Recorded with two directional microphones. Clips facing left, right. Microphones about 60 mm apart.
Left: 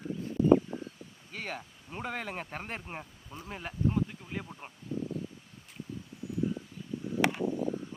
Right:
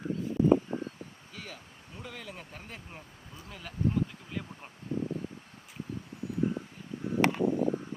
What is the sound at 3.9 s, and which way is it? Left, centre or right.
Insect, centre.